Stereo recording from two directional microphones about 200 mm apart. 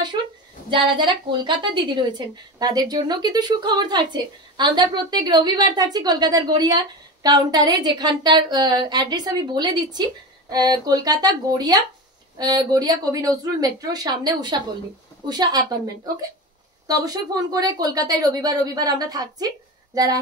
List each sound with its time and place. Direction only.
0.7 s a woman's voice: 25° right (ahead or behind)
16.8 s a woman's voice: 20° right (ahead or behind)